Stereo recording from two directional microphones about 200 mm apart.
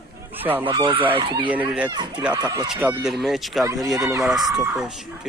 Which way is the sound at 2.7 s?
5° right (ahead or behind).